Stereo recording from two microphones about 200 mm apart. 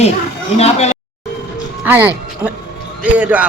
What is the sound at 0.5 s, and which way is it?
Speech, 30° left (ahead or behind).